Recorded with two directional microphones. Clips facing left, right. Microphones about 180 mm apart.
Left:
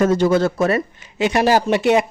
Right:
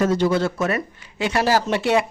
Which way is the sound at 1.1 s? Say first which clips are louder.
Left 4 dB; 20° left (ahead or behind).